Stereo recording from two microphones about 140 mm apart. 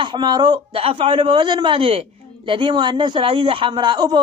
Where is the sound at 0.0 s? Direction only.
30° right (ahead or behind).